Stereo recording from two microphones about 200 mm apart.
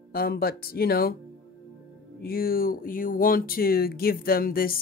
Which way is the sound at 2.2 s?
50° left (ahead or behind).